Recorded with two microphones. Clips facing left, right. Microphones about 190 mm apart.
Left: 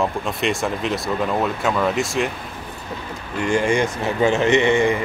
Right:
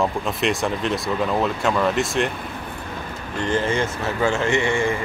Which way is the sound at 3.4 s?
15° left (ahead or behind).